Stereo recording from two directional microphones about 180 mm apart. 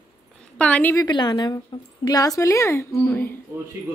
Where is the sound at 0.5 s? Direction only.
5° left (ahead or behind).